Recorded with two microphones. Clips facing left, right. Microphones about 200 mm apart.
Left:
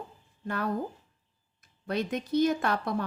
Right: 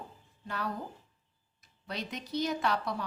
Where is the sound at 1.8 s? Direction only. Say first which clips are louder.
Left 9 dB; 50° left (ahead or behind).